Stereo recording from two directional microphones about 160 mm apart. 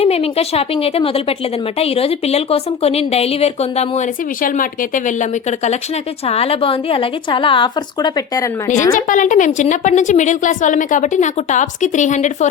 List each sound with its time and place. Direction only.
0.0 s a woman's voice: 40° left (ahead or behind); by 8.7 s 20° left (ahead or behind)
9.0 s a woman's voice: 55° left (ahead or behind)